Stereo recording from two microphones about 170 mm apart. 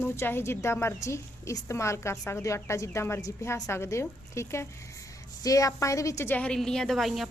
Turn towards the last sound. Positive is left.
turn(degrees=0)  # may be behind; listen again after turning